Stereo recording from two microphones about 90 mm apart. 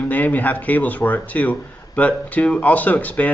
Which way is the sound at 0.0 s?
20° left (ahead or behind).